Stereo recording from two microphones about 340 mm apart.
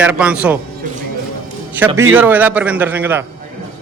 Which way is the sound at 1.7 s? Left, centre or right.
Centre.